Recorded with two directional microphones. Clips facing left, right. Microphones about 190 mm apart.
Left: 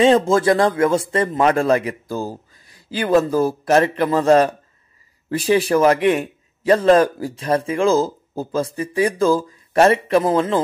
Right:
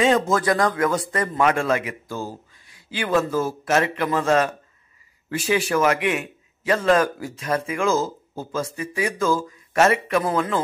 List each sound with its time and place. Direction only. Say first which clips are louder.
0.0 s a man's voice: left 5 dB; 30° left (ahead or behind)